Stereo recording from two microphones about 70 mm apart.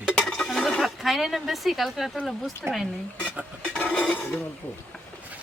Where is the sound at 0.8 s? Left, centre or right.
Centre.